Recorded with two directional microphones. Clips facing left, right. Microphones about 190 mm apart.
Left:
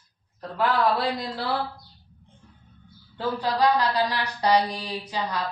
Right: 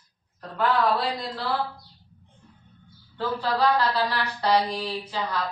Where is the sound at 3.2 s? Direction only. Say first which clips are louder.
Left 1 dB; 15° left (ahead or behind).